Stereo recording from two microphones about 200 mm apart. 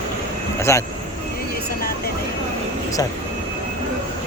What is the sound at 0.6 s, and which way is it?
Speech, 15° left (ahead or behind).